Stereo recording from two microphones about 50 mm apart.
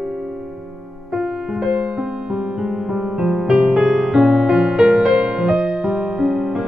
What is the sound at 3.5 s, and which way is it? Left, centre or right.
Music, right.